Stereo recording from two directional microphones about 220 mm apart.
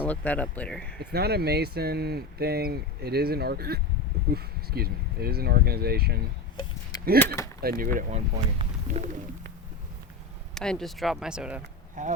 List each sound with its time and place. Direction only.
0.0 s speech: 5° left (ahead or behind)
0.9 s speech: 45° right (ahead or behind)
6.9 s a sound: 15° left (ahead or behind)
7.6 s speech: 40° right (ahead or behind)
10.5 s speech: 5° left (ahead or behind)
12.0 s speech: 35° right (ahead or behind)